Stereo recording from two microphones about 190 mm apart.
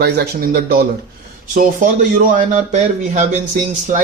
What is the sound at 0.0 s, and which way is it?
Speech, 55° right (ahead or behind).